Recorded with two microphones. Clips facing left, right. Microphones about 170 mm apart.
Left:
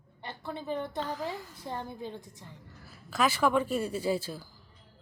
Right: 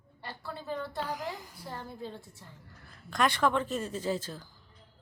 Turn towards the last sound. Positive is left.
turn(degrees=10)  # may be behind; listen again after turning